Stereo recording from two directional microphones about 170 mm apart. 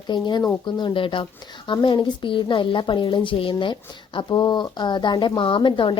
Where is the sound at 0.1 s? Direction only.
25° left (ahead or behind).